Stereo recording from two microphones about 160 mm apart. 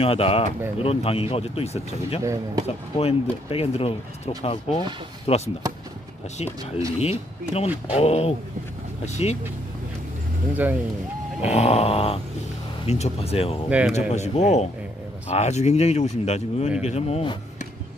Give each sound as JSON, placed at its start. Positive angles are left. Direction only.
{"t": 0.0, "sound": "speech", "side_deg": 35}
{"t": 2.2, "sound": "speech", "side_deg": -20}
{"t": 2.6, "sound": "speech", "side_deg": 40}
{"t": 6.6, "sound": "speech", "side_deg": -20}
{"t": 7.0, "sound": "speech", "side_deg": 40}
{"t": 10.5, "sound": "speech", "side_deg": -10}
{"t": 11.5, "sound": "speech", "side_deg": 40}
{"t": 13.7, "sound": "speech", "side_deg": -10}
{"t": 14.1, "sound": "speech", "side_deg": 45}